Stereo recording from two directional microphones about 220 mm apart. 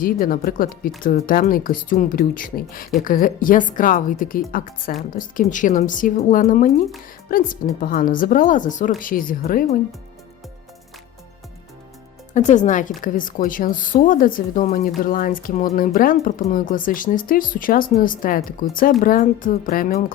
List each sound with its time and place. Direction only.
0.0 s speech: 40° left (ahead or behind)
12.3 s speech: 35° left (ahead or behind)